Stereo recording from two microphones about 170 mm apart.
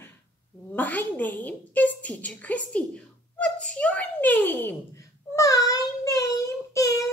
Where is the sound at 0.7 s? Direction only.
10° left (ahead or behind).